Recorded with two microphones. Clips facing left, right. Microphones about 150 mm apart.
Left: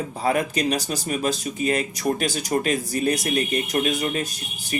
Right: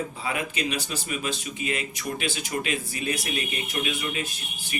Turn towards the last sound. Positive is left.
turn(degrees=40)  # may be behind; listen again after turning